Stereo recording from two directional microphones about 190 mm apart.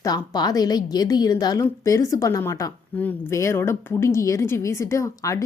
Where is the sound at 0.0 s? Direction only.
20° left (ahead or behind).